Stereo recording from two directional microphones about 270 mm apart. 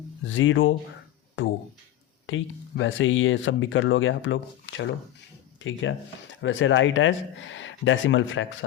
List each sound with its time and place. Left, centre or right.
0.3 s speech: left
2.2 s speech: left